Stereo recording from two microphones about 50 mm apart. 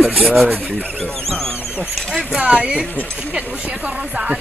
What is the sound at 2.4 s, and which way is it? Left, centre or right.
Speech, right.